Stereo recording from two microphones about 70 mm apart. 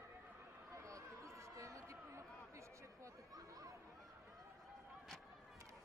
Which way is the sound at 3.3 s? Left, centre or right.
Right.